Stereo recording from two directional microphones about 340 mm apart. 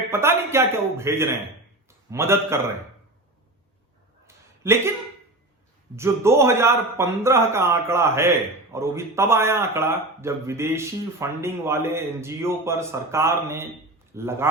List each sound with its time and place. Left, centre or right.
0.1 s a man's voice: centre
4.6 s speech: centre
6.0 s speech: centre